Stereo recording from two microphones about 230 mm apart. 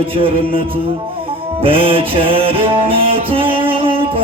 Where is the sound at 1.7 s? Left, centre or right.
Right.